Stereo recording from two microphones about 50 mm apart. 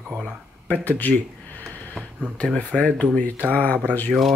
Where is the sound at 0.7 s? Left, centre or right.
Left.